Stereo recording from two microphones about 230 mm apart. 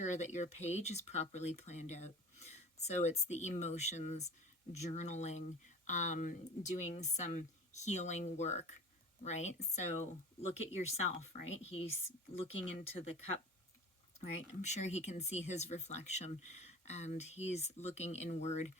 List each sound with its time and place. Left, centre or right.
0.0 s speech: left
14.6 s speech: left